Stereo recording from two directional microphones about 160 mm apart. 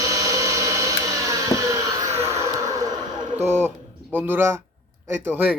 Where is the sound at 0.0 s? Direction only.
20° right (ahead or behind).